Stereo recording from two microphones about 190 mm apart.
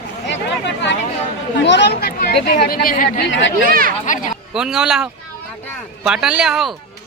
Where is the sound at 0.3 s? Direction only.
70° left (ahead or behind).